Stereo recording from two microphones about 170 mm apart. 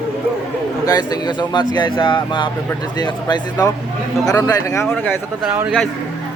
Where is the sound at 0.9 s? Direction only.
25° left (ahead or behind).